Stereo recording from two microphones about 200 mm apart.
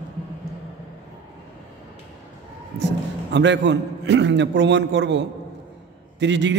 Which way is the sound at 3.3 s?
60° right (ahead or behind).